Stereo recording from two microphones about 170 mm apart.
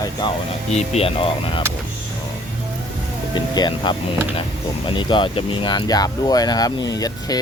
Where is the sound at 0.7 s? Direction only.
40° left (ahead or behind).